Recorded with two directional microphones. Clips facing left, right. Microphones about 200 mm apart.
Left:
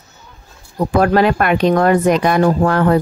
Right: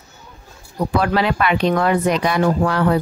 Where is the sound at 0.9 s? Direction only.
45° left (ahead or behind).